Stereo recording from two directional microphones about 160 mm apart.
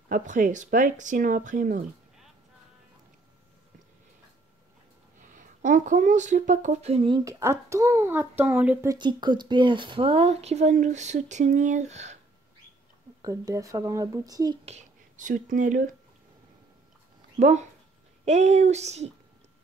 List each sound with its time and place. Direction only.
0.1 s speech: 55° right (ahead or behind)
5.2 s speech: 55° right (ahead or behind)
7.2 s a child's voice: 20° right (ahead or behind)
8.9 s speech: 30° right (ahead or behind); by 12.2 s 45° right (ahead or behind)
13.2 s speech: 20° right (ahead or behind)
14.6 s speech: 45° right (ahead or behind)
17.4 s speech: 45° right (ahead or behind)